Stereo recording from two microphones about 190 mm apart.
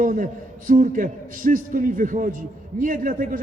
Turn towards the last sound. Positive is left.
turn(degrees=-45)  # may be behind; listen again after turning